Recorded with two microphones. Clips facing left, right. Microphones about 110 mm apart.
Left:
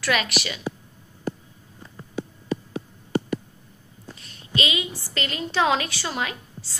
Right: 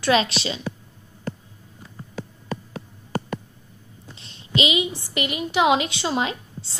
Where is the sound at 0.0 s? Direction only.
25° right (ahead or behind).